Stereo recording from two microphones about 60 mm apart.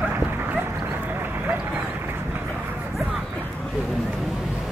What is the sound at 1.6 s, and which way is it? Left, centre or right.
Vehicle, right.